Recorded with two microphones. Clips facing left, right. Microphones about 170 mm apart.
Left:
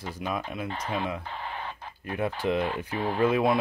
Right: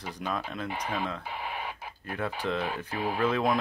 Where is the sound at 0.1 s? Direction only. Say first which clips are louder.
Left 1 dB; 10° left (ahead or behind).